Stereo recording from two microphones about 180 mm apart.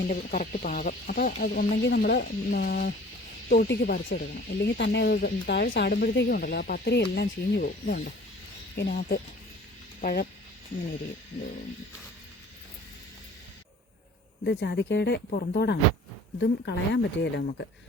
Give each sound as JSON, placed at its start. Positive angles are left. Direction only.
{"t": 0.1, "sound": "speech", "side_deg": 45}
{"t": 14.6, "sound": "speech", "side_deg": 75}
{"t": 15.3, "sound": "speech", "side_deg": 55}
{"t": 16.4, "sound": "speech", "side_deg": 75}